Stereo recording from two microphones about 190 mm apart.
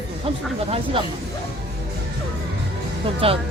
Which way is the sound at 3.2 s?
30° right (ahead or behind).